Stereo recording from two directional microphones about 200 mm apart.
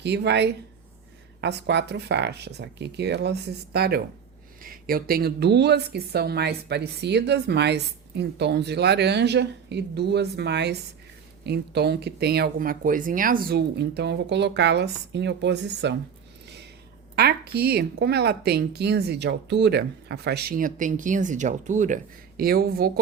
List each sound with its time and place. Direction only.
0.0 s speech: 55° right (ahead or behind)
17.2 s speech: 50° right (ahead or behind)